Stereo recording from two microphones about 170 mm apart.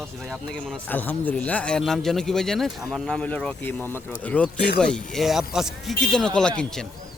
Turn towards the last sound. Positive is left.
turn(degrees=5)  # may be behind; listen again after turning